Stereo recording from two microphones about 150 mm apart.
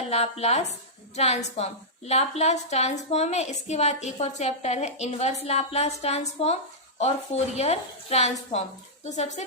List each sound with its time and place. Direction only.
0.1 s a woman's voice: 45° left (ahead or behind)